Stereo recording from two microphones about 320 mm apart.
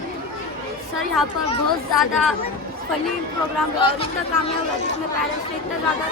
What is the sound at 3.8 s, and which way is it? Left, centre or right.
Speech, centre.